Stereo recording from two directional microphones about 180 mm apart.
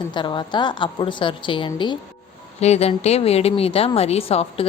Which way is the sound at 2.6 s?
35° left (ahead or behind).